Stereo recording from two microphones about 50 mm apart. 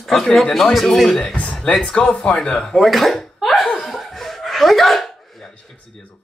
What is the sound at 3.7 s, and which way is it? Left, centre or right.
Chuckle, centre.